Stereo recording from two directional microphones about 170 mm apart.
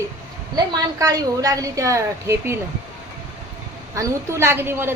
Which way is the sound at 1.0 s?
20° right (ahead or behind).